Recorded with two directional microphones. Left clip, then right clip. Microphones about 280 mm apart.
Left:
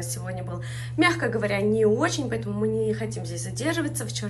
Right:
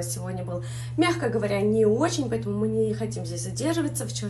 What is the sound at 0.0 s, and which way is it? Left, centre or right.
Speech, centre.